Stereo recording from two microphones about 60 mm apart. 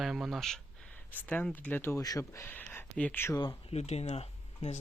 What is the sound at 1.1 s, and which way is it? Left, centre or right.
Speech, left.